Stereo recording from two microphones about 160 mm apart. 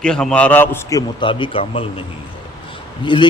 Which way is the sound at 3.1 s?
30° left (ahead or behind).